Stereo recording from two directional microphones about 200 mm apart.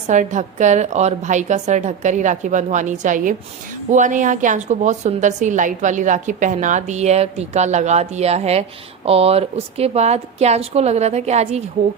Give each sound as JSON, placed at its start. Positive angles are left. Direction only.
{"t": 0.1, "sound": "a woman's voice", "side_deg": -35}